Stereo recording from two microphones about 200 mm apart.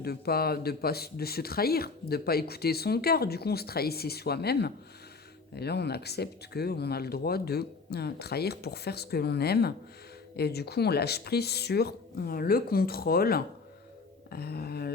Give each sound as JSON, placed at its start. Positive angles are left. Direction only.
{"t": 0.0, "sound": "speech", "side_deg": 50}